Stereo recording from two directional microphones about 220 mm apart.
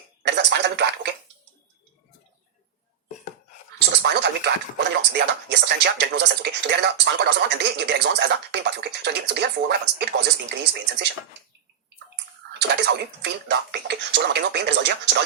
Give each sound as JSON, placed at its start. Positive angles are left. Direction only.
{"t": 0.2, "sound": "a sound", "side_deg": -50}
{"t": 4.0, "sound": "speech", "side_deg": -50}
{"t": 12.5, "sound": "speech", "side_deg": -50}